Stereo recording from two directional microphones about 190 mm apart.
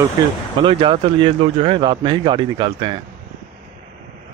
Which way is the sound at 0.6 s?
25° right (ahead or behind).